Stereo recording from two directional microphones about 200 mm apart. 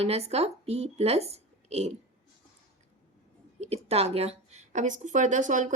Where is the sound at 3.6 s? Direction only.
30° right (ahead or behind).